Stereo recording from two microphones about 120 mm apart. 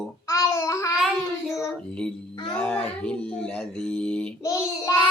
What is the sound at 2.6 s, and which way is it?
Speech, 10° left (ahead or behind).